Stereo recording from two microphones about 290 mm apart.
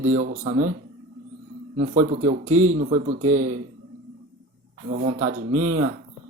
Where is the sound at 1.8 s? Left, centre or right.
Right.